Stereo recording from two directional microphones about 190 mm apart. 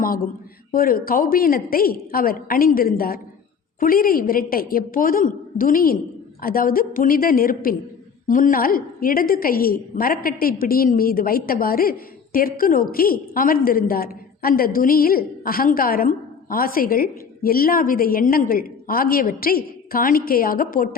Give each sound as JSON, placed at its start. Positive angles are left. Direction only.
{"t": 0.7, "sound": "a woman's voice", "side_deg": 50}